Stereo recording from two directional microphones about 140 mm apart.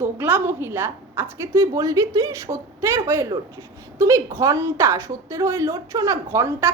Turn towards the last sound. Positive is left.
turn(degrees=-20)  # may be behind; listen again after turning